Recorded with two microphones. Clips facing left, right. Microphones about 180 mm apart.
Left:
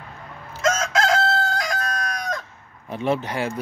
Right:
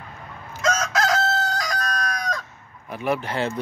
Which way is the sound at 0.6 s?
50° left (ahead or behind).